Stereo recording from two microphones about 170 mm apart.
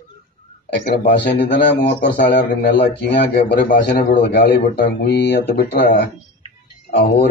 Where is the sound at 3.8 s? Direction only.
75° left (ahead or behind).